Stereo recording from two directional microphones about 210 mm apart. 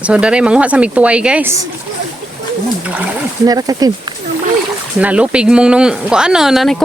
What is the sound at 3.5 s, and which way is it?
Speech, 15° right (ahead or behind).